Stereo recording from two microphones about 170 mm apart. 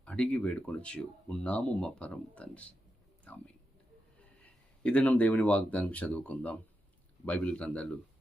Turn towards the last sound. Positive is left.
turn(degrees=5)  # may be behind; listen again after turning